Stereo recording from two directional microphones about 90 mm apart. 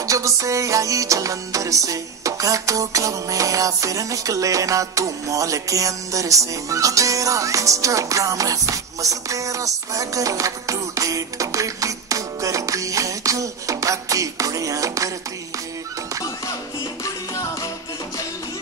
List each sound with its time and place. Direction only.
0.0 s music: 35° right (ahead or behind)
17.0 s music: 40° left (ahead or behind)